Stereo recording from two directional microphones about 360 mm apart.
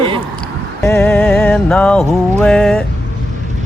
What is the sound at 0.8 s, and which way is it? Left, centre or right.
Music, centre.